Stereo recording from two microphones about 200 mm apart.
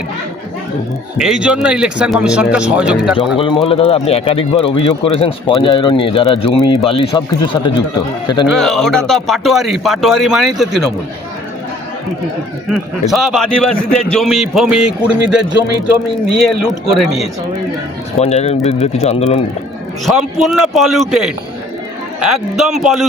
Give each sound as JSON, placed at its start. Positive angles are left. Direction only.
{"t": 1.2, "sound": "speech", "side_deg": -5}
{"t": 3.3, "sound": "a man's voice", "side_deg": 25}
{"t": 8.4, "sound": "speech", "side_deg": 0}
{"t": 12.7, "sound": "speech", "side_deg": 0}
{"t": 18.2, "sound": "speech", "side_deg": 30}
{"t": 20.1, "sound": "speech", "side_deg": 0}